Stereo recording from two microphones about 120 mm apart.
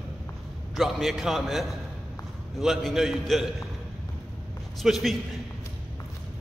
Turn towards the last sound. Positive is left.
turn(degrees=0)  # may be behind; listen again after turning